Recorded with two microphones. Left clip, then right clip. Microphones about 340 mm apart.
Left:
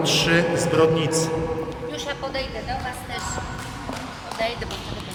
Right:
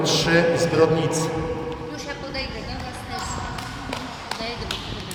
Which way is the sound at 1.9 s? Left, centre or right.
Left.